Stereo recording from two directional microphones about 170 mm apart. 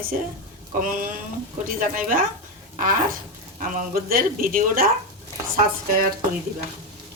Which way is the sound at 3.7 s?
55° right (ahead or behind).